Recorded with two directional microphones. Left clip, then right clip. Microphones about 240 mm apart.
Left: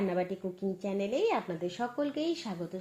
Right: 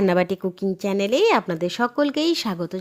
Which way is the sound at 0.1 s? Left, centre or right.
Right.